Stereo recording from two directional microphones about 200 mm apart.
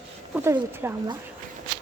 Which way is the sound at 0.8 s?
10° right (ahead or behind).